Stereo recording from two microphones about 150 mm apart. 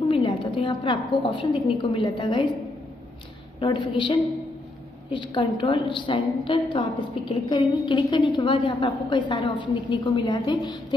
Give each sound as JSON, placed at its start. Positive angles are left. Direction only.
{"t": 0.1, "sound": "a woman's voice", "side_deg": 35}
{"t": 3.5, "sound": "a woman's voice", "side_deg": 30}